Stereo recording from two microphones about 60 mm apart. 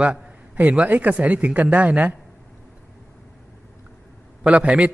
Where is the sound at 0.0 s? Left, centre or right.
Right.